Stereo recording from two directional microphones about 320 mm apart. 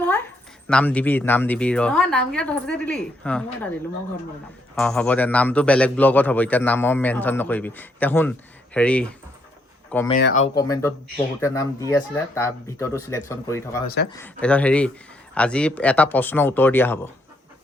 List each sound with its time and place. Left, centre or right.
0.7 s a man's voice: centre
4.7 s a man's voice: centre
10.2 s speech: left
10.6 s speech: centre
13.8 s speech: left
14.1 s a man's voice: centre